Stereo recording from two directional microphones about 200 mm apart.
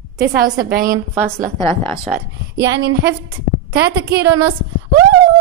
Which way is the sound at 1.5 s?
15° left (ahead or behind).